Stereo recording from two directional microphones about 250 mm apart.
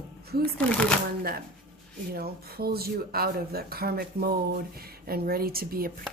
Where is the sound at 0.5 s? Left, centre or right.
Centre.